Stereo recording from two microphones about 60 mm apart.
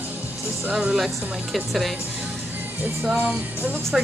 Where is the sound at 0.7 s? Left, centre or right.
Centre.